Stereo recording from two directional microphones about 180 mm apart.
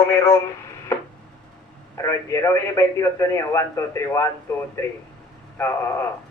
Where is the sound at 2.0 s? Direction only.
15° left (ahead or behind).